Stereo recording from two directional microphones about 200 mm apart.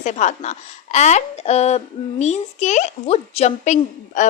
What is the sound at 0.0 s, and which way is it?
A woman's voice, 35° left (ahead or behind).